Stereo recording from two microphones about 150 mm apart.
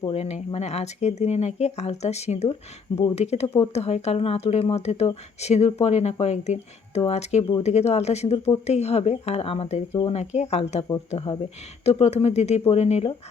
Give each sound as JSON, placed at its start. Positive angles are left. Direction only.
{"t": 0.1, "sound": "speech", "side_deg": 45}
{"t": 11.9, "sound": "speech", "side_deg": 45}